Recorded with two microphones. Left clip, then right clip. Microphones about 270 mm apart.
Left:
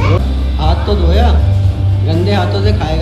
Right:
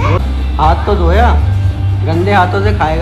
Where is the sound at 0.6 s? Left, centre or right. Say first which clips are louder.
Right 5 dB; centre.